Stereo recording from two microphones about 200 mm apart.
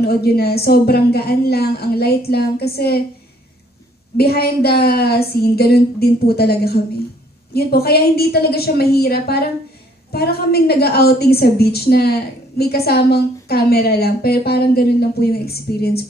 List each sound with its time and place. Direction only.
0.0 s a woman's voice: 50° left (ahead or behind)
4.2 s a woman's voice: 50° left (ahead or behind)